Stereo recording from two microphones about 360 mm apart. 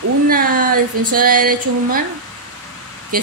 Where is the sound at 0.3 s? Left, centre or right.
Right.